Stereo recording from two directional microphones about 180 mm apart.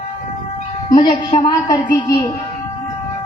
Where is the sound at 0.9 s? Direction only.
25° left (ahead or behind).